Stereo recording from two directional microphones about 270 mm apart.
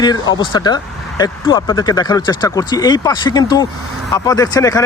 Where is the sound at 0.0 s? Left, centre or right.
Centre.